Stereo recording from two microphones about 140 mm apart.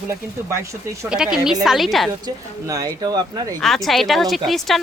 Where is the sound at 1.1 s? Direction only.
5° right (ahead or behind).